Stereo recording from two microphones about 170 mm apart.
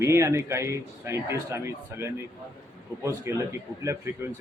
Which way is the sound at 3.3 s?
15° right (ahead or behind).